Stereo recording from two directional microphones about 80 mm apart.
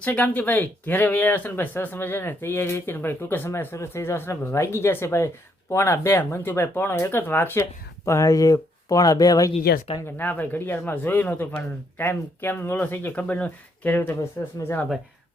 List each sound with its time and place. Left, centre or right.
0.0 s speech: centre; by 9.5 s left
10.2 s speech: left